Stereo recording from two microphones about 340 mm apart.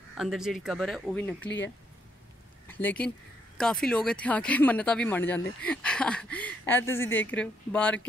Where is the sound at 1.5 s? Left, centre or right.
Left.